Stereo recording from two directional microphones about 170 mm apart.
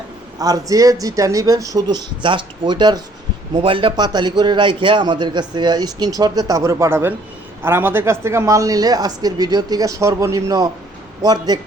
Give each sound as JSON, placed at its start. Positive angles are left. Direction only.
{"t": 0.3, "sound": "a man's voice", "side_deg": -20}